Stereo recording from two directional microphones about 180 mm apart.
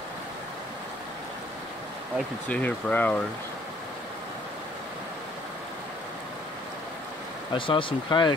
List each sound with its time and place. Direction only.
2.4 s speech: 10° left (ahead or behind)
7.5 s speech: 30° left (ahead or behind)